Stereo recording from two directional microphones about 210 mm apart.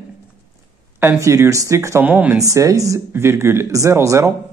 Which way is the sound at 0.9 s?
10° right (ahead or behind).